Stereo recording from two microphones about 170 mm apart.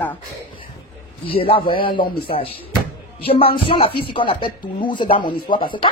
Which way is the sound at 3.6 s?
30° left (ahead or behind).